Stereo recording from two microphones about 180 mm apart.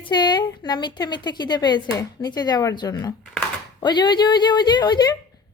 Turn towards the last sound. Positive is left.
turn(degrees=20)  # may be behind; listen again after turning